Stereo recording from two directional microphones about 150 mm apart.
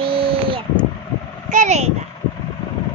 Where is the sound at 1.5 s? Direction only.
50° right (ahead or behind).